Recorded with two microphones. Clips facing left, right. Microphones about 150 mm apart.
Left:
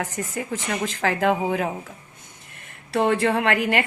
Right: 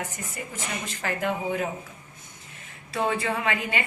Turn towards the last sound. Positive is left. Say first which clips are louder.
# left 7 dB
turn(degrees=70)  # may be behind; listen again after turning